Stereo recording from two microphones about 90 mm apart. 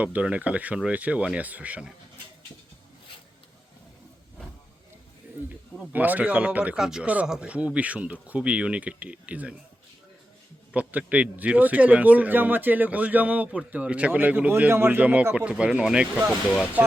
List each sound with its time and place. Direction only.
0.0 s speech: 15° right (ahead or behind)
5.9 s speech: 20° right (ahead or behind)
10.7 s speech: 15° right (ahead or behind)